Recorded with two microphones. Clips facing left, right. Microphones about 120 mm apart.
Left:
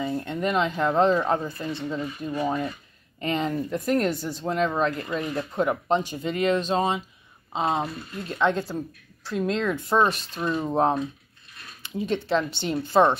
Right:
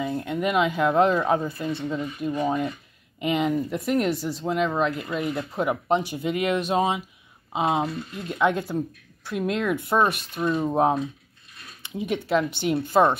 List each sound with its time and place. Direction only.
0.0 s speech: 5° right (ahead or behind)